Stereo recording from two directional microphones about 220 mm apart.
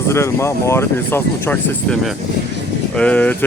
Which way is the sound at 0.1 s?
10° left (ahead or behind).